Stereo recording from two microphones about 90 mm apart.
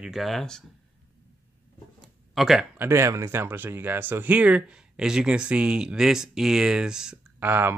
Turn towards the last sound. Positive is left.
turn(degrees=-25)  # may be behind; listen again after turning